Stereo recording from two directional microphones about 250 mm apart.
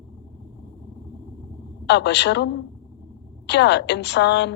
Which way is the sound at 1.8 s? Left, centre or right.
Left.